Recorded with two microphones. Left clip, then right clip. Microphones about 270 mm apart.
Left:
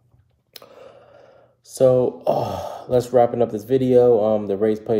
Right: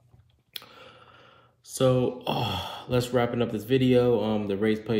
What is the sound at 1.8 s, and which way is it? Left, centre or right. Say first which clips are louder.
Speech: left 8 dB; centre.